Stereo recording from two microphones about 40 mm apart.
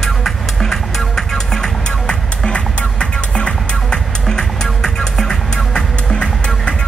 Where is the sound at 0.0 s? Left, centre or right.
Centre.